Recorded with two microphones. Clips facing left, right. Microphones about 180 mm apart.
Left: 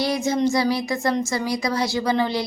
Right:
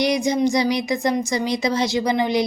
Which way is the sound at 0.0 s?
15° right (ahead or behind).